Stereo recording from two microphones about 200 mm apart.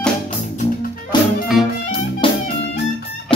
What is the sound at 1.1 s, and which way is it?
Music, 20° left (ahead or behind).